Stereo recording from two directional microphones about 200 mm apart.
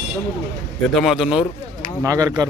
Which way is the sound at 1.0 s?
Centre (ahead or behind).